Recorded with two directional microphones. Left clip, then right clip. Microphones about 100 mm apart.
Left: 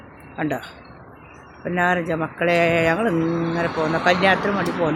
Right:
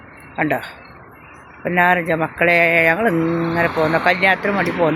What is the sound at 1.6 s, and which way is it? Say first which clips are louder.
Speech: right 5 dB; 25° right (ahead or behind).